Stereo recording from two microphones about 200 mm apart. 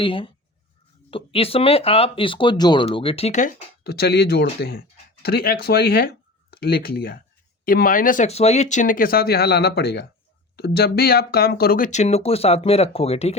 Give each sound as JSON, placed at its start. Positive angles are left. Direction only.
{"t": 0.0, "sound": "speech", "side_deg": 25}
{"t": 3.8, "sound": "speech", "side_deg": 50}